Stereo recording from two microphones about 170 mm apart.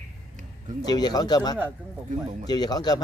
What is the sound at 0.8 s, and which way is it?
Speech, 25° left (ahead or behind).